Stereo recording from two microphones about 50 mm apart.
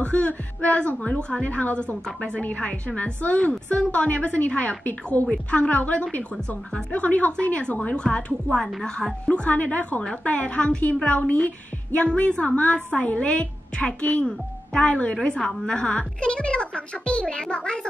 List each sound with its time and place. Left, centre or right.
0.0 s a sound: left
1.0 s a woman's voice: left
9.5 s a woman's voice: left